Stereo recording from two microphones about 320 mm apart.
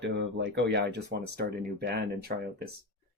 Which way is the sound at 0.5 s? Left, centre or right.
Right.